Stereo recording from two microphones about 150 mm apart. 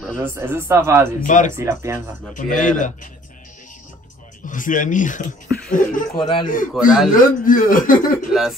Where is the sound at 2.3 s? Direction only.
60° left (ahead or behind).